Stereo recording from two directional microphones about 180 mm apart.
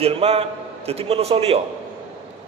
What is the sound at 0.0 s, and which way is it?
A man's voice, 35° right (ahead or behind).